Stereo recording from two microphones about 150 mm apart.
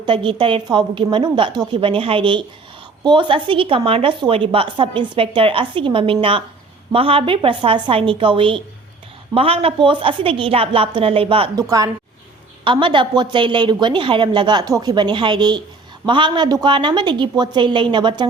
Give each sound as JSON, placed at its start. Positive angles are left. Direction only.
{"t": 0.0, "sound": "a woman's voice", "side_deg": -35}
{"t": 12.6, "sound": "a woman's voice", "side_deg": -35}